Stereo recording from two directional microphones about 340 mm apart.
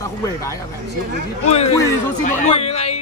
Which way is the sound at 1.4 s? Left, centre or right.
Centre.